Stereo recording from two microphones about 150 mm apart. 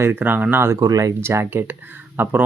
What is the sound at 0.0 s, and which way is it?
Speech, 15° right (ahead or behind).